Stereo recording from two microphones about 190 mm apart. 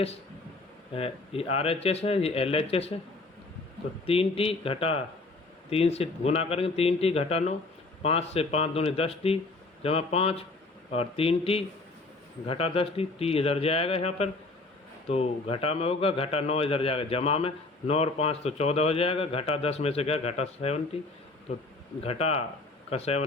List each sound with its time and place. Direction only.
0.9 s a man's voice: 30° left (ahead or behind)
4.0 s a man's voice: 30° left (ahead or behind)
22.0 s a man's voice: 35° left (ahead or behind)